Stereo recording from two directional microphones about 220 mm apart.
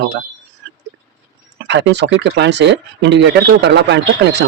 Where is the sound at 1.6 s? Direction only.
50° right (ahead or behind).